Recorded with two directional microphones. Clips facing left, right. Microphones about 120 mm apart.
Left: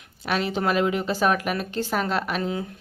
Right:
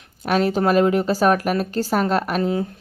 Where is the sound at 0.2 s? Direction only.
45° right (ahead or behind).